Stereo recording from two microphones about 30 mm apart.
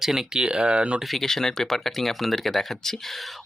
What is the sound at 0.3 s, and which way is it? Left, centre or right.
Speech, right.